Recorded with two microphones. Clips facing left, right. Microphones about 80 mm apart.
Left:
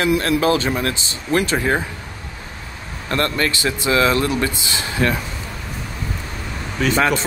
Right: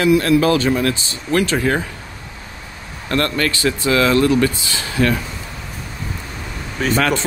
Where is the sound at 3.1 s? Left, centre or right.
Left.